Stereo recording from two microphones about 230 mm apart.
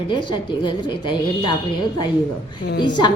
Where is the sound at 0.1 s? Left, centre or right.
Centre.